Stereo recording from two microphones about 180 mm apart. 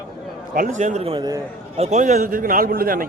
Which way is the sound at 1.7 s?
40° right (ahead or behind).